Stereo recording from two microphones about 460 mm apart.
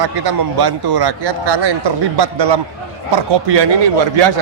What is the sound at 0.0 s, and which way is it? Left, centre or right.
A man's voice, right.